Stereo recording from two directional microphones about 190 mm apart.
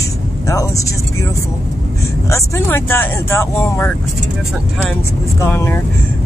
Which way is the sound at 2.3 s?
15° left (ahead or behind).